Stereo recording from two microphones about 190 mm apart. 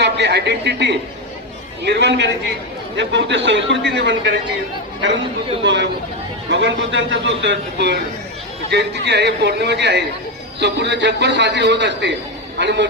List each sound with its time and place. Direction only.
0.0 s a man's voice: 60° right (ahead or behind)
5.6 s a man's voice: 65° right (ahead or behind)